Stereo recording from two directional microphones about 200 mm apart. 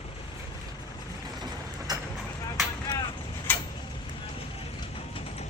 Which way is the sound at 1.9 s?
20° right (ahead or behind).